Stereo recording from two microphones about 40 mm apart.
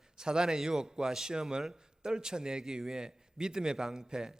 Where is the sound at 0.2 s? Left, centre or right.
Centre.